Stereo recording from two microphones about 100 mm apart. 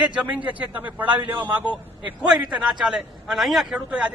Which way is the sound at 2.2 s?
10° right (ahead or behind).